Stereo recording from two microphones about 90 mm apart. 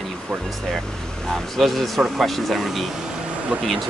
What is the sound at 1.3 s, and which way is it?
Speech, 5° left (ahead or behind).